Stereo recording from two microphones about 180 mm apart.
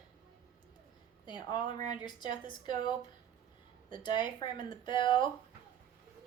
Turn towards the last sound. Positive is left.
turn(degrees=25)  # may be behind; listen again after turning